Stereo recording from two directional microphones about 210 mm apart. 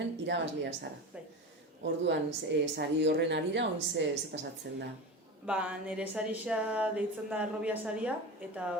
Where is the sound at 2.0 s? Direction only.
55° right (ahead or behind).